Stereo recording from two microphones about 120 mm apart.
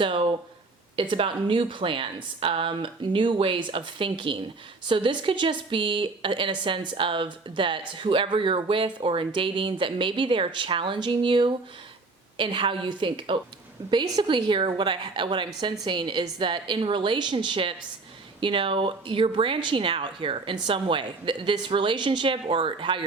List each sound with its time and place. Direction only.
0.0 s a woman's voice: 50° right (ahead or behind)